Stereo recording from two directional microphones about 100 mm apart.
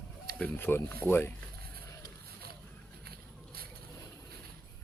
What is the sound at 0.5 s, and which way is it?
Speech, 20° left (ahead or behind).